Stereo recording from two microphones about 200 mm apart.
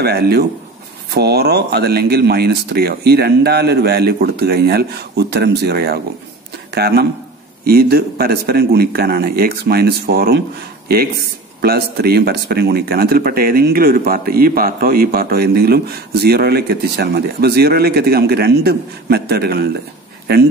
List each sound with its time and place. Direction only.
0.0 s speech: 50° right (ahead or behind)